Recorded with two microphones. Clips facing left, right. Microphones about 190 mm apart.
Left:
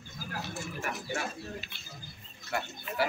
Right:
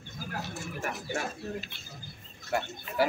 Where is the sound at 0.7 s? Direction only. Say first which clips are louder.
Right 2 dB; 45° right (ahead or behind).